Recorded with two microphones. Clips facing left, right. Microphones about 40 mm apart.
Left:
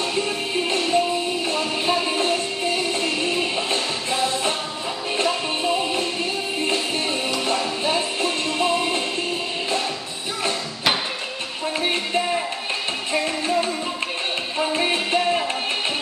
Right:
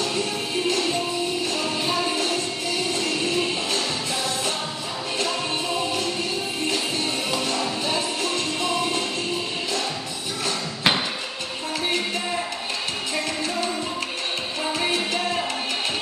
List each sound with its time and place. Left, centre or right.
0.0 s music: left
7.4 s music: left
11.8 s music: left
14.7 s music: left